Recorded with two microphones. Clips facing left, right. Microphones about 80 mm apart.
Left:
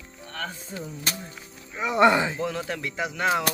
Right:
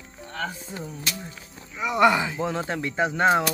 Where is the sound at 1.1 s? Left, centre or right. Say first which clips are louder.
Left 1 dB; left.